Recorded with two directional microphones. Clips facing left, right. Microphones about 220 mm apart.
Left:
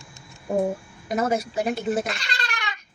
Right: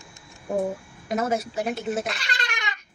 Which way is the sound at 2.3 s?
20° right (ahead or behind).